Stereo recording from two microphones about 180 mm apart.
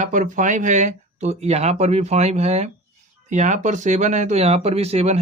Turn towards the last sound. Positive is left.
turn(degrees=-35)  # may be behind; listen again after turning